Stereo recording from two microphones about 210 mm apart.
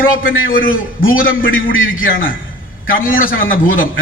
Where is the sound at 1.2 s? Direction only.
70° left (ahead or behind).